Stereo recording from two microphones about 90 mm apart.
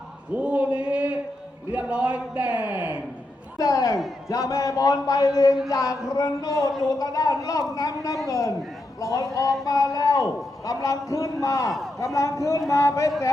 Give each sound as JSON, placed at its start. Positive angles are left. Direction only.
{"t": 0.3, "sound": "a man's voice", "side_deg": -15}
{"t": 3.6, "sound": "a man's voice", "side_deg": 40}